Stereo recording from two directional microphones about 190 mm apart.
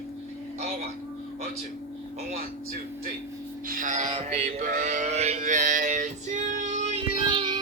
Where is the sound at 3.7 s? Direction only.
45° right (ahead or behind).